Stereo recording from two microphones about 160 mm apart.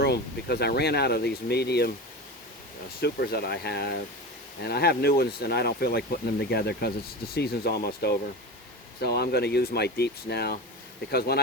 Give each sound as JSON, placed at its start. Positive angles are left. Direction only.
{"t": 0.0, "sound": "speech", "side_deg": 85}
{"t": 3.0, "sound": "speech", "side_deg": 80}
{"t": 11.1, "sound": "speech", "side_deg": 80}